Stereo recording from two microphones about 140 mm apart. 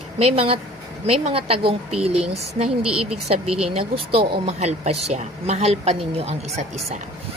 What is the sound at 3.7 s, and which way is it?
Speech, 40° right (ahead or behind).